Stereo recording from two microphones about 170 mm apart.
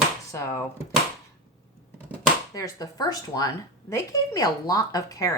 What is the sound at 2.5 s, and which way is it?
Speech, 20° left (ahead or behind).